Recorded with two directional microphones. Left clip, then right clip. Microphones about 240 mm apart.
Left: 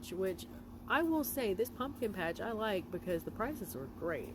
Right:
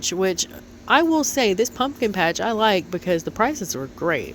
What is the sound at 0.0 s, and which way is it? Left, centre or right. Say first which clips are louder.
Speech: right 16 dB; right.